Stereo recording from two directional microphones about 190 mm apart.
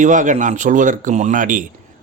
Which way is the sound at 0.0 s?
40° right (ahead or behind).